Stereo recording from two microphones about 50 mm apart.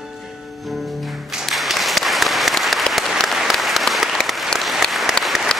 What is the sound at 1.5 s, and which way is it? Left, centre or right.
Applause, centre.